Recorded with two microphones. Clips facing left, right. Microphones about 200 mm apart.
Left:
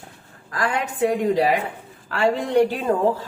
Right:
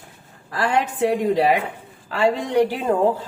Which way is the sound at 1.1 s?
35° right (ahead or behind).